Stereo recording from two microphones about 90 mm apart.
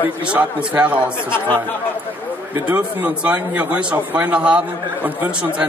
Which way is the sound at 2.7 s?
15° right (ahead or behind).